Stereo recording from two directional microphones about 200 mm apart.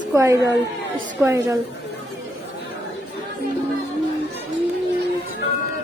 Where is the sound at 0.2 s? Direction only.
15° right (ahead or behind).